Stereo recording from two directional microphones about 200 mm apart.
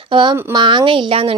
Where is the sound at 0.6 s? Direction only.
25° right (ahead or behind).